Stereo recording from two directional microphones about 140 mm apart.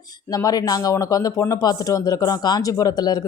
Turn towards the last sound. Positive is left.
turn(degrees=25)  # may be behind; listen again after turning